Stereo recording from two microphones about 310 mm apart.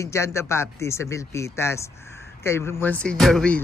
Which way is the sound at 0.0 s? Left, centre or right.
Centre.